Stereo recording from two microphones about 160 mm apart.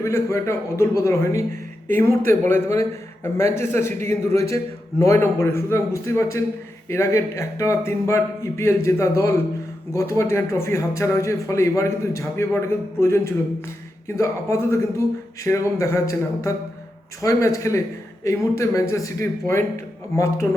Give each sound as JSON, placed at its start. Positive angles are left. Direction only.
{"t": 0.0, "sound": "a man's voice", "side_deg": 15}